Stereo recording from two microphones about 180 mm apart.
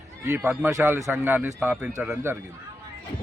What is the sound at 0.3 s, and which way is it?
A man's voice, 10° right (ahead or behind).